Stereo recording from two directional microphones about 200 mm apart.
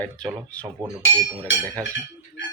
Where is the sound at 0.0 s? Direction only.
5° left (ahead or behind).